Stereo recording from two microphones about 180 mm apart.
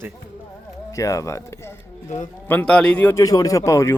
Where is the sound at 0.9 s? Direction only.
20° left (ahead or behind).